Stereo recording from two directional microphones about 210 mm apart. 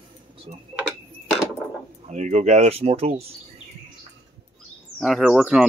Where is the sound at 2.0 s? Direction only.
35° right (ahead or behind).